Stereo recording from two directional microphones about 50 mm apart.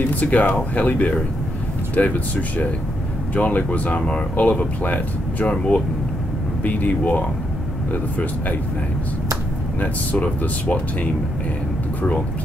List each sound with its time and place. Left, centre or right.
0.1 s speech: left
6.6 s speech: left
10.1 s speech: left